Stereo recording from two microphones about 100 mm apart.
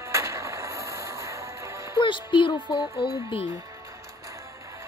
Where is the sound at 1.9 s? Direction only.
55° left (ahead or behind).